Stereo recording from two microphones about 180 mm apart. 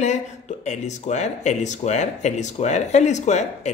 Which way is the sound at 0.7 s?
40° left (ahead or behind).